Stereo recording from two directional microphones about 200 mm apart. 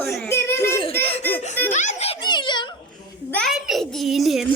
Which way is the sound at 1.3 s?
35° left (ahead or behind).